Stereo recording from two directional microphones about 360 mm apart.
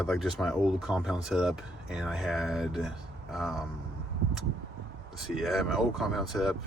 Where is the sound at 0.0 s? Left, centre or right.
Centre.